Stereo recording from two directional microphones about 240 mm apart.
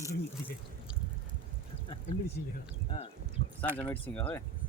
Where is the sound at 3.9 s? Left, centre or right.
Centre.